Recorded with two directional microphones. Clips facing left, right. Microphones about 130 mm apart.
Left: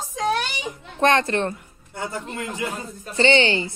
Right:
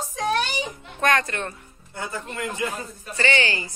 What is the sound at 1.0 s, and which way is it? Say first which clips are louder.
Speech: left 4 dB; 30° left (ahead or behind).